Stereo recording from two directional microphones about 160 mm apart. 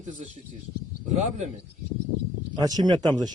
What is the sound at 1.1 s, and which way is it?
Speech, 45° right (ahead or behind).